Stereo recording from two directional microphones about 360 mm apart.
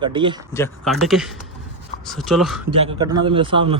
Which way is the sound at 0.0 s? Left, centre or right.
Centre.